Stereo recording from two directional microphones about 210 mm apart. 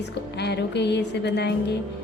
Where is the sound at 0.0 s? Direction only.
55° left (ahead or behind).